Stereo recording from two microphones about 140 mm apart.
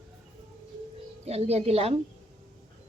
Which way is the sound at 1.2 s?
50° right (ahead or behind).